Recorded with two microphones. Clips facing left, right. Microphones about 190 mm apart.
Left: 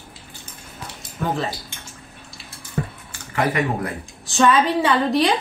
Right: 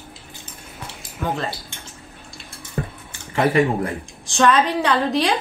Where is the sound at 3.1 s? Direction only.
25° right (ahead or behind).